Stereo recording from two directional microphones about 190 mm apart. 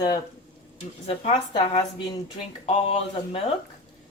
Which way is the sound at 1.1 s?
30° left (ahead or behind).